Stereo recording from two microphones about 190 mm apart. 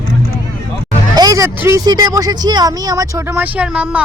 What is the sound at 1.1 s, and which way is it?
Speech, 20° right (ahead or behind).